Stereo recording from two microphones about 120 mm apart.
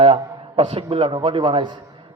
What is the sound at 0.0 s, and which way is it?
A man's voice, 50° right (ahead or behind).